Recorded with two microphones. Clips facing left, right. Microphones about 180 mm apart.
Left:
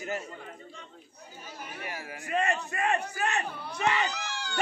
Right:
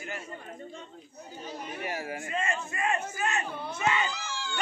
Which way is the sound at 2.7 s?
65° left (ahead or behind).